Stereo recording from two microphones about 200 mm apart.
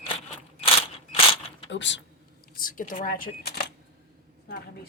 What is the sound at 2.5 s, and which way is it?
A woman's voice, 45° left (ahead or behind).